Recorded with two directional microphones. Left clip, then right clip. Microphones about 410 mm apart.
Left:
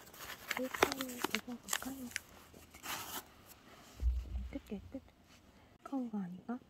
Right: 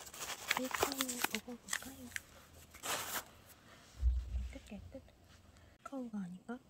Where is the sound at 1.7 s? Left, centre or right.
Left.